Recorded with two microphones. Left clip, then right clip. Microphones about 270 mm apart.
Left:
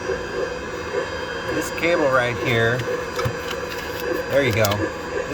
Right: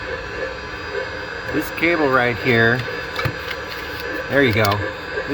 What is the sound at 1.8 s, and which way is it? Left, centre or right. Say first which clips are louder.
Speech: right 2 dB; centre.